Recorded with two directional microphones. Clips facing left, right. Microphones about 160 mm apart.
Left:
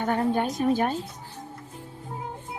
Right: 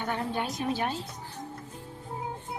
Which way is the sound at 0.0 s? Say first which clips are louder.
Left 7 dB; 45° left (ahead or behind).